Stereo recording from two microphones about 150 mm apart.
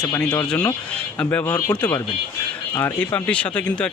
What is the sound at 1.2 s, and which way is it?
Speech, 10° left (ahead or behind).